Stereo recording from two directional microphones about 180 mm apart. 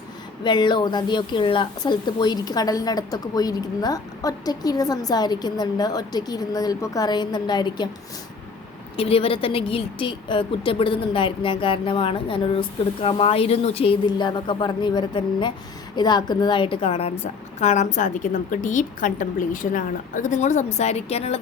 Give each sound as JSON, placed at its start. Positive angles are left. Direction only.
{"t": 0.4, "sound": "speech", "side_deg": 25}
{"t": 9.0, "sound": "a woman's voice", "side_deg": 30}